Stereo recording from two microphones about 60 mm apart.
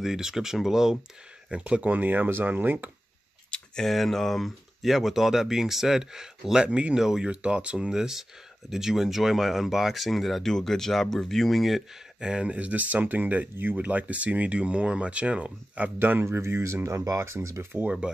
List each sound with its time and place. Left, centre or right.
0.0 s speech: centre
1.5 s speech: right
3.4 s tick: centre
3.8 s speech: centre
12.2 s speech: centre
16.0 s speech: right
16.3 s speech: right
18.0 s speech: centre